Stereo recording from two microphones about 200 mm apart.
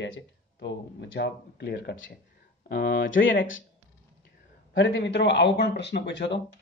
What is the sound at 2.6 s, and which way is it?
Speech, 50° left (ahead or behind).